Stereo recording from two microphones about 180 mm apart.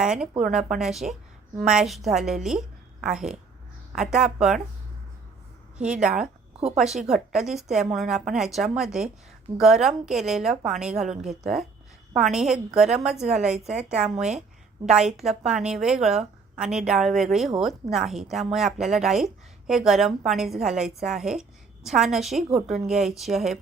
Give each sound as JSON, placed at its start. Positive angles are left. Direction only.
{"t": 0.0, "sound": "a woman's voice", "side_deg": -5}
{"t": 5.7, "sound": "a woman's voice", "side_deg": -5}
{"t": 14.8, "sound": "a woman's voice", "side_deg": -5}